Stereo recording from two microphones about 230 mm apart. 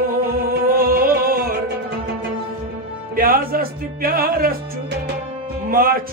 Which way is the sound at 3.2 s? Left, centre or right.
Right.